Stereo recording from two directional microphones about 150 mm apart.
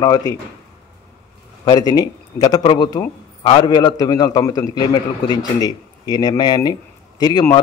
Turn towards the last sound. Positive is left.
turn(degrees=25)  # may be behind; listen again after turning